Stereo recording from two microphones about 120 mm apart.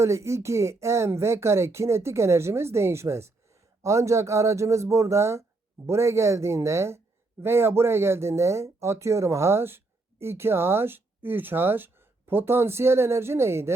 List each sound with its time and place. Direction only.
0.0 s speech: 25° right (ahead or behind)